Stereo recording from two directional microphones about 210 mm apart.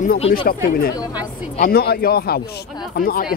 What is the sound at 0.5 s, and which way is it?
Speech, 45° left (ahead or behind).